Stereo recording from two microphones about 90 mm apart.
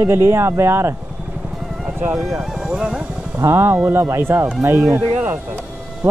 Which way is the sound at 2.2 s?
5° right (ahead or behind).